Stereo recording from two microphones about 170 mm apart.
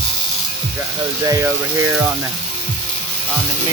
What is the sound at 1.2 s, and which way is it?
Speech, 20° right (ahead or behind).